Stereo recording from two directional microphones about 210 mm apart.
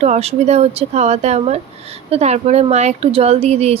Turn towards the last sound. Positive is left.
turn(degrees=-30)  # may be behind; listen again after turning